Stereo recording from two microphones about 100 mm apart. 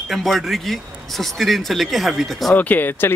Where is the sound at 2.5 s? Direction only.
20° left (ahead or behind).